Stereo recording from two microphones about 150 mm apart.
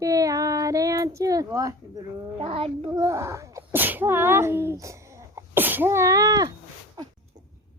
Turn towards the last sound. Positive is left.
turn(degrees=-25)  # may be behind; listen again after turning